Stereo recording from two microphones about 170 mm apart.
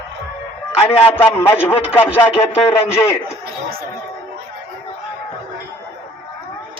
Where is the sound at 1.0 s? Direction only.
10° left (ahead or behind).